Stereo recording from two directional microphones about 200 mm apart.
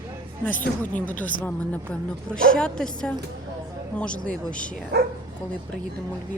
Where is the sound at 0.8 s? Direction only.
10° left (ahead or behind).